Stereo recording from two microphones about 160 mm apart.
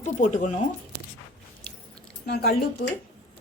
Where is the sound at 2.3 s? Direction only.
85° left.